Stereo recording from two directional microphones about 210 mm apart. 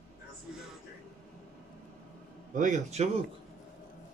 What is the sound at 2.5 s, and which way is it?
Speech, 35° right (ahead or behind).